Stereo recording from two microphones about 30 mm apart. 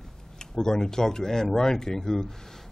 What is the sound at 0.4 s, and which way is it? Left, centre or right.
Speech, left.